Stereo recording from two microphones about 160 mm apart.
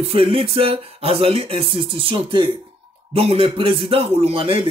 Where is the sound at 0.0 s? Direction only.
35° right (ahead or behind).